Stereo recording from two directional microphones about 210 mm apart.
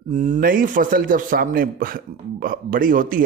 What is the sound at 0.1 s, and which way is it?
Speech, 35° right (ahead or behind).